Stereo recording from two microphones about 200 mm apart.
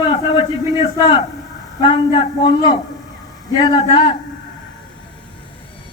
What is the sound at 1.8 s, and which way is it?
Speech, 25° left (ahead or behind).